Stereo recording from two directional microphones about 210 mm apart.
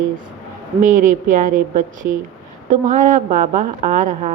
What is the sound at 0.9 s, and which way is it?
Speech, 40° right (ahead or behind).